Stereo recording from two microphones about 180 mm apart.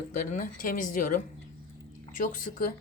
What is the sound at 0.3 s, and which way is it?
Speech, 50° left (ahead or behind).